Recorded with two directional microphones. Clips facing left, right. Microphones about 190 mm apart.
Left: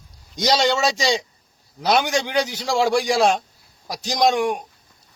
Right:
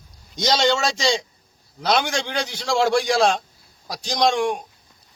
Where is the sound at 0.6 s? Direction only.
5° left (ahead or behind).